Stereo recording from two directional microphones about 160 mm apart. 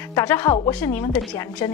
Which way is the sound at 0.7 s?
10° left (ahead or behind).